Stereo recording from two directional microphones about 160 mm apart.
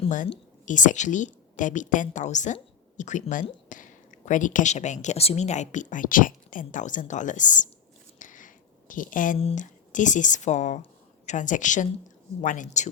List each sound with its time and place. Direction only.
0.6 s speech: 50° left (ahead or behind)
8.2 s a sound: 55° left (ahead or behind)
9.4 s speech: 45° left (ahead or behind)